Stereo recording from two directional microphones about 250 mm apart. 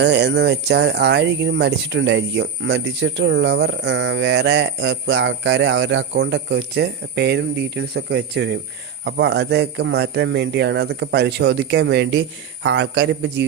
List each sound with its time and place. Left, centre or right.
0.0 s speech: right